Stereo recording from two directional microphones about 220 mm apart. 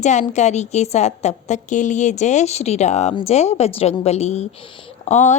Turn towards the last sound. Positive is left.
turn(degrees=30)  # may be behind; listen again after turning